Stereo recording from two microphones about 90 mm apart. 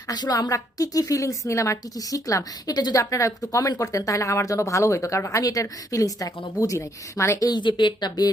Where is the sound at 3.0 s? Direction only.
35° left (ahead or behind).